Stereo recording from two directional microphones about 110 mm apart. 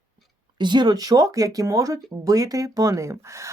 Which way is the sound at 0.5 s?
45° right (ahead or behind).